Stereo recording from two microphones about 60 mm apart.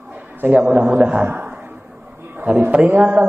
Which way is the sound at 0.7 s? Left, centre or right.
Right.